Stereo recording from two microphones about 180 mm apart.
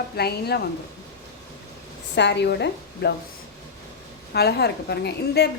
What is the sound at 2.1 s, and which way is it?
A woman's voice, 70° left (ahead or behind).